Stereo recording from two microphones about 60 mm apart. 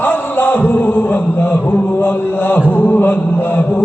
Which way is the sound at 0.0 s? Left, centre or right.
Left.